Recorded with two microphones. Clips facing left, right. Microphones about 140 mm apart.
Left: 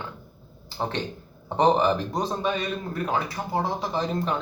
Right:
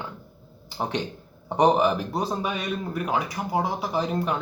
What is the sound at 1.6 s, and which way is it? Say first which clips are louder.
A man's voice: right 1 dB; 10° right (ahead or behind).